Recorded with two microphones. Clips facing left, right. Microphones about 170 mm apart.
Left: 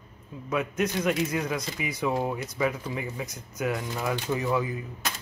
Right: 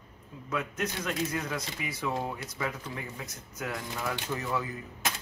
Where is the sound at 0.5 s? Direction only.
15° left (ahead or behind).